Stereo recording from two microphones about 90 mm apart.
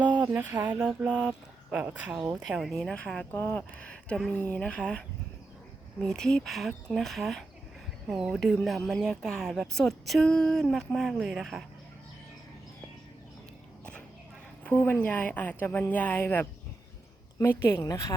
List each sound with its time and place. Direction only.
0.3 s a sound: 20° right (ahead or behind)
1.0 s speech: 10° right (ahead or behind)
2.4 s speech: centre (ahead or behind)
3.3 s speech: 25° left (ahead or behind)
3.8 s speech: 15° left (ahead or behind)
14.6 s a sound: 20° left (ahead or behind)
15.0 s speech: 20° left (ahead or behind)
17.7 s a woman's voice: 40° left (ahead or behind)